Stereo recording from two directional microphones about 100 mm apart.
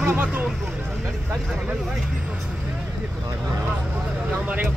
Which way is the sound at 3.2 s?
30° right (ahead or behind).